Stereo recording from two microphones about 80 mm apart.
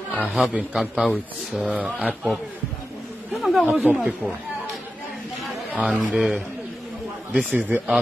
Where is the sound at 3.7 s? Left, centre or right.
Centre.